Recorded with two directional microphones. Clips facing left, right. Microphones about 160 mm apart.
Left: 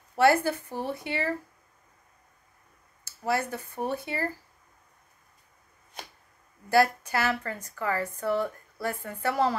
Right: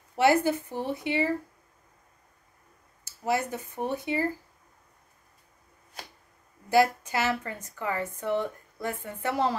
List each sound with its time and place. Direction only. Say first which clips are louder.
0.2 s speech: even; 20° right (ahead or behind)
3.3 s a woman's voice: even; 20° right (ahead or behind)
6.7 s a woman's voice: even; 20° right (ahead or behind)